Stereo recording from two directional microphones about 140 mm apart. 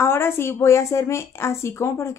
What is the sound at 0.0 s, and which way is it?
A woman's voice, 15° left (ahead or behind).